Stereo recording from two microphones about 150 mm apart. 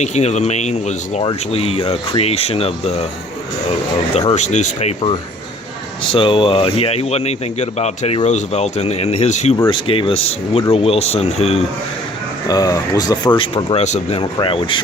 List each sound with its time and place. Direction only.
0.0 s speech: 50° left (ahead or behind)
4.3 s speech: 50° left (ahead or behind)
6.1 s speech: 35° left (ahead or behind)
9.6 s speech: 35° left (ahead or behind)
12.5 s speech: 25° left (ahead or behind)
13.7 s speech: 50° left (ahead or behind)
14.3 s speech: 35° left (ahead or behind)